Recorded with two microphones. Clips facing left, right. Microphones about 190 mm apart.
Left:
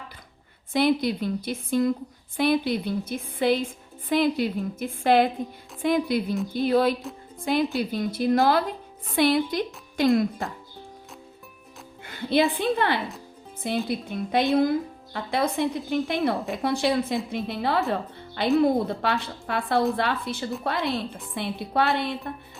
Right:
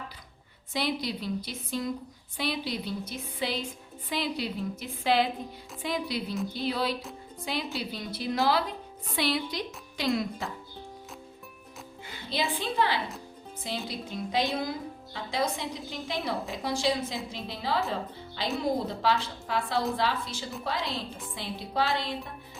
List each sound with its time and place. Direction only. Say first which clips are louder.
0.7 s a woman's voice: left 9 dB; 55° left (ahead or behind)
12.0 s a woman's voice: left 10 dB; 60° left (ahead or behind)